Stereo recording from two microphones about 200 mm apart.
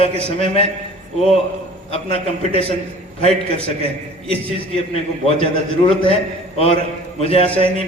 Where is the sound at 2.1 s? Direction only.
30° left (ahead or behind).